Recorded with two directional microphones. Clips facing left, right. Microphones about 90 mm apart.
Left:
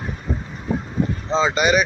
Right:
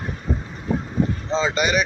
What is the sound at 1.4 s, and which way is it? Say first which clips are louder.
Speech: left 3 dB; 20° left (ahead or behind).